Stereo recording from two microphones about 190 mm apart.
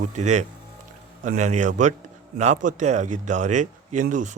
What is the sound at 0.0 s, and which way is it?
Speech, 40° right (ahead or behind).